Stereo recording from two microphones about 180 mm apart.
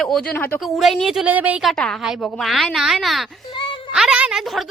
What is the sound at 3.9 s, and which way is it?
Speech, 5° right (ahead or behind).